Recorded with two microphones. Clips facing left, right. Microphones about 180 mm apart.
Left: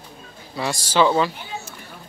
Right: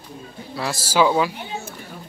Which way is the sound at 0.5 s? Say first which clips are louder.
Even; 5° right (ahead or behind).